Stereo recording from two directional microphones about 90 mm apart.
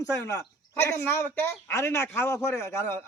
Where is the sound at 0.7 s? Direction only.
25° left (ahead or behind).